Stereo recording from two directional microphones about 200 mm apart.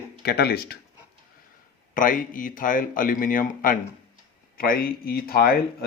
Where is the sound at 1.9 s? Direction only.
45° left (ahead or behind).